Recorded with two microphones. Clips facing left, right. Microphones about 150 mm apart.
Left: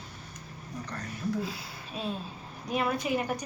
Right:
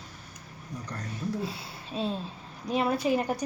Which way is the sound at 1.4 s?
30° right (ahead or behind).